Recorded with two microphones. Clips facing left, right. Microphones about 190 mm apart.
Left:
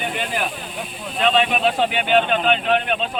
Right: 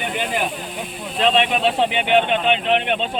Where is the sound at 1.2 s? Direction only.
25° right (ahead or behind).